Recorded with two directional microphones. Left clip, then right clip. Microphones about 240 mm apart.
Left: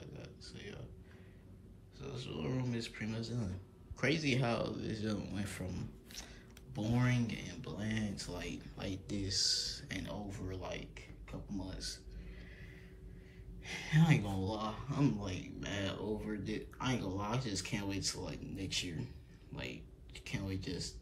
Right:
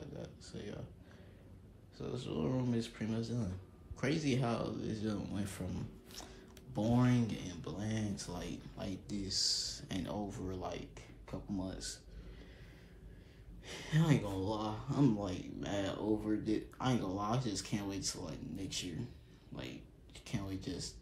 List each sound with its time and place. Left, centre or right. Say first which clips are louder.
0.0 s a sound: right 3 dB; centre
2.0 s speech: right 4 dB; centre
13.7 s speech: left 1 dB; centre